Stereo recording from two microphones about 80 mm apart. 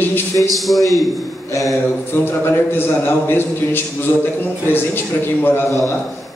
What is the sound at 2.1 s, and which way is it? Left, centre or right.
A man's voice, left.